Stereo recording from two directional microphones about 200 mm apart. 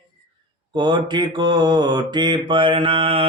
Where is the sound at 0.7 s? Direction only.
20° right (ahead or behind).